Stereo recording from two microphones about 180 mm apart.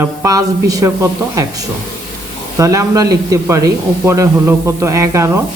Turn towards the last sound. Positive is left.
turn(degrees=-15)  # may be behind; listen again after turning